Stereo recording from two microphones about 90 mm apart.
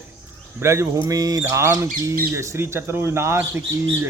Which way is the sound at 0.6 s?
30° right (ahead or behind).